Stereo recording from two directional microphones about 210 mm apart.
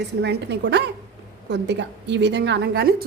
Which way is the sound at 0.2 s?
55° right (ahead or behind).